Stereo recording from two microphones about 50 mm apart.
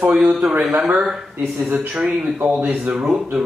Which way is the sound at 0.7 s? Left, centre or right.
Right.